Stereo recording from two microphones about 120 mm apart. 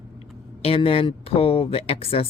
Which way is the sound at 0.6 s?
55° left (ahead or behind).